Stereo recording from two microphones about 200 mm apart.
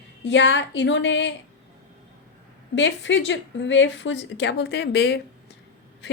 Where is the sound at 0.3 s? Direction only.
65° left (ahead or behind).